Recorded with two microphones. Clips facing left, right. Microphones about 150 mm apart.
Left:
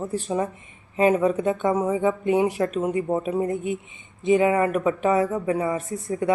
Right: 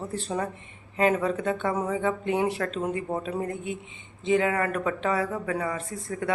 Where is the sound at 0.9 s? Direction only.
20° left (ahead or behind).